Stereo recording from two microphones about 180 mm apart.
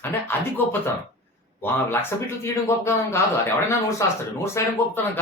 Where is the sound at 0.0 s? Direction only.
10° left (ahead or behind).